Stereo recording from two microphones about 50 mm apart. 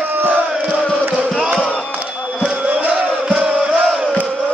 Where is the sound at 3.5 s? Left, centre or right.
Right.